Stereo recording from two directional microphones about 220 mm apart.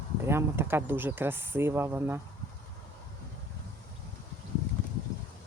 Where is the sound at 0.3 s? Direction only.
10° right (ahead or behind).